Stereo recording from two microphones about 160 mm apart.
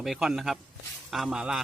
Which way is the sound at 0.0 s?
Centre (ahead or behind).